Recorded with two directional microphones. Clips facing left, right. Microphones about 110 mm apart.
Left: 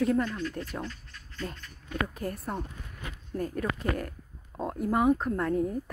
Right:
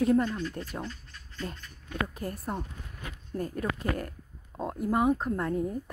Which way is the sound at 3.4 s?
30° right (ahead or behind).